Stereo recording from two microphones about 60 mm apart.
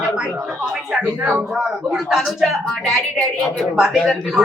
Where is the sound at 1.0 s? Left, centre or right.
Right.